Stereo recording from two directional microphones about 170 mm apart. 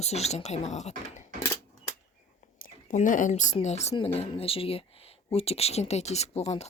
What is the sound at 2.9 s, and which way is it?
Speech, 50° left (ahead or behind).